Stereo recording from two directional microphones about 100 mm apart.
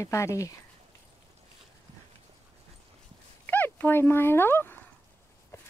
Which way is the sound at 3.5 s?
20° left (ahead or behind).